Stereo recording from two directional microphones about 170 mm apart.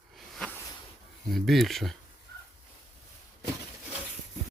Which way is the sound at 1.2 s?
Centre (ahead or behind).